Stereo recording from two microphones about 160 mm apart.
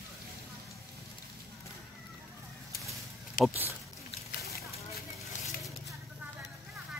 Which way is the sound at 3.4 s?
60° left (ahead or behind).